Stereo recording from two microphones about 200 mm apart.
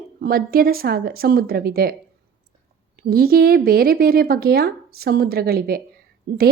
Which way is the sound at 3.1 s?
50° right (ahead or behind).